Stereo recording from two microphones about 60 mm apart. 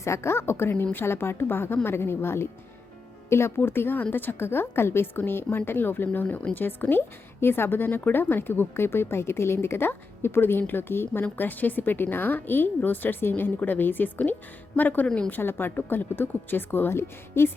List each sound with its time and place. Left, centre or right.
0.0 s a woman's voice: left
3.6 s a woman's voice: left
15.0 s a woman's voice: centre
15.3 s a woman's voice: left